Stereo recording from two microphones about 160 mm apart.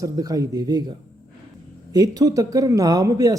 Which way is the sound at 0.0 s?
25° right (ahead or behind).